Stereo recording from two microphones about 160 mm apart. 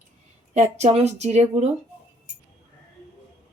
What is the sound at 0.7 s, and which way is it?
Speech, 45° right (ahead or behind).